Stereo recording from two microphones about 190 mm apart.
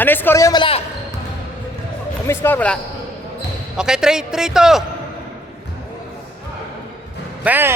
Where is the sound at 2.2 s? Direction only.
10° left (ahead or behind).